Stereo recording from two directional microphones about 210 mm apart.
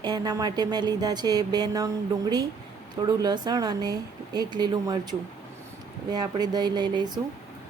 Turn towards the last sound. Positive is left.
turn(degrees=-20)  # may be behind; listen again after turning